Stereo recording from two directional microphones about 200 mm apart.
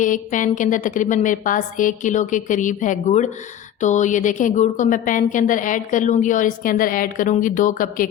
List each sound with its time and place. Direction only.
0.0 s a woman's voice: 40° left (ahead or behind)